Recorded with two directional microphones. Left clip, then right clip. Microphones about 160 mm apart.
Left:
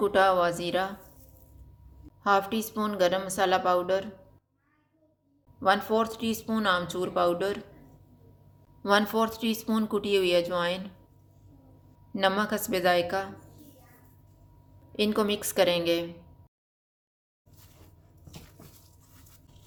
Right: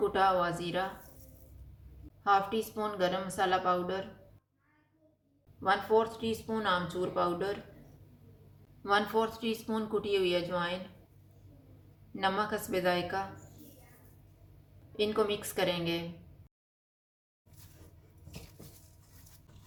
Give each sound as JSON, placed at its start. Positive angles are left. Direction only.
{"t": 0.0, "sound": "speech", "side_deg": 65}
{"t": 2.2, "sound": "speech", "side_deg": 65}
{"t": 5.5, "sound": "speech", "side_deg": 65}
{"t": 8.8, "sound": "speech", "side_deg": 60}
{"t": 12.1, "sound": "speech", "side_deg": 60}
{"t": 14.9, "sound": "speech", "side_deg": 65}